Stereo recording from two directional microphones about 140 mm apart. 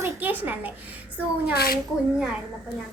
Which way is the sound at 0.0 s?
15° right (ahead or behind).